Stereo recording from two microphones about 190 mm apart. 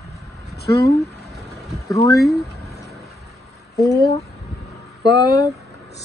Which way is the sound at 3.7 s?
15° left (ahead or behind).